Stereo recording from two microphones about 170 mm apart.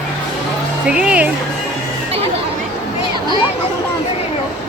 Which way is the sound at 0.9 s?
5° right (ahead or behind).